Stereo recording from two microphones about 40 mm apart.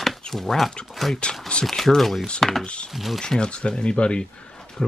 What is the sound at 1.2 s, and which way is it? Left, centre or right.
Speech, left.